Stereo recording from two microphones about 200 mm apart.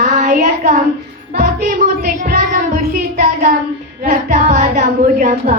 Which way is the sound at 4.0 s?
40° right (ahead or behind).